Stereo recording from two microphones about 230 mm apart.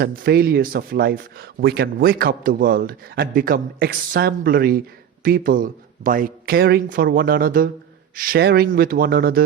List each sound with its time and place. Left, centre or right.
0.0 s speech: right